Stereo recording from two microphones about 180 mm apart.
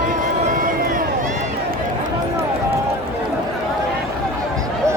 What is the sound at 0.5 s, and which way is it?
Run, 50° right (ahead or behind).